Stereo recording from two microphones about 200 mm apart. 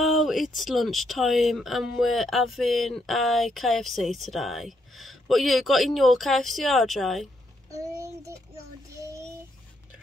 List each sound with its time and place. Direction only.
0.0 s speech: centre (ahead or behind)
7.7 s child singing: 15° right (ahead or behind)